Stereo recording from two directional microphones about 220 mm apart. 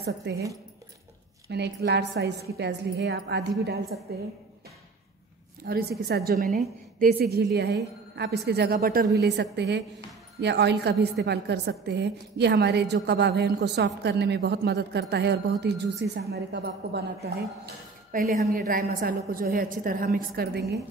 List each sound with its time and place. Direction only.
0.0 s a woman's voice: 50° right (ahead or behind)
1.8 s a woman's voice: 50° right (ahead or behind)
5.7 s a woman's voice: 45° right (ahead or behind)
18.5 s a woman's voice: 40° right (ahead or behind)